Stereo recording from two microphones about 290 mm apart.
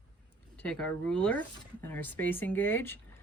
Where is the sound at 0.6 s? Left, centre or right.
Centre.